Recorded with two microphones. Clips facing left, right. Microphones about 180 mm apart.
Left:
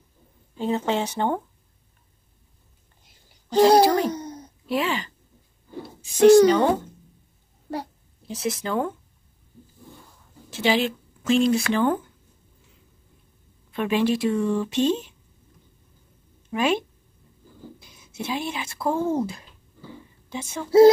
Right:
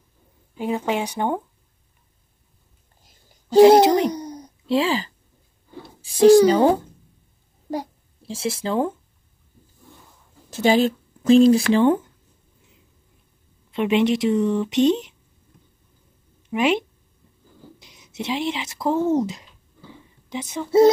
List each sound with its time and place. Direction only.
0.6 s speech: 15° right (ahead or behind)
3.5 s a child's voice: 20° right (ahead or behind)
4.6 s speech: 30° right (ahead or behind)
8.3 s speech: 30° right (ahead or behind)
10.5 s speech: 45° right (ahead or behind)
13.7 s speech: 20° right (ahead or behind)
16.4 s speech: 20° right (ahead or behind)
20.6 s a sound: centre (ahead or behind)